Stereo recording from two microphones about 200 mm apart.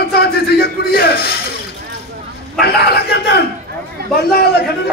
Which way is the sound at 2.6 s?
55° left (ahead or behind).